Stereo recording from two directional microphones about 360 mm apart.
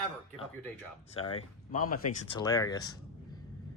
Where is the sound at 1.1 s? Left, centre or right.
Centre.